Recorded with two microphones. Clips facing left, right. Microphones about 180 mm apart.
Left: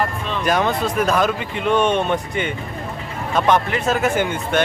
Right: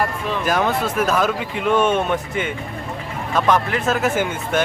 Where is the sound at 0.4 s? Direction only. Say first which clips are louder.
Left 1 dB; 5° right (ahead or behind).